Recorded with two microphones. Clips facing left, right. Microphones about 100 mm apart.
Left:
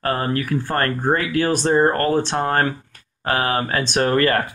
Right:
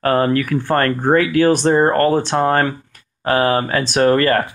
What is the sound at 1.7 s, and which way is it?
Speech, 35° right (ahead or behind).